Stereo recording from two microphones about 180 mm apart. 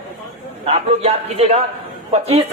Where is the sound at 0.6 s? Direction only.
35° right (ahead or behind).